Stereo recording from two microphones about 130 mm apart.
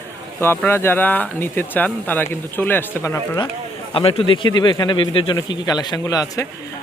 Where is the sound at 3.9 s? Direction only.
40° left (ahead or behind); by 6.4 s 25° left (ahead or behind).